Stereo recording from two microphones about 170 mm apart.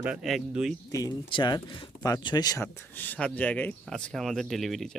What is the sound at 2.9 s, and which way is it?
Speech, 10° left (ahead or behind).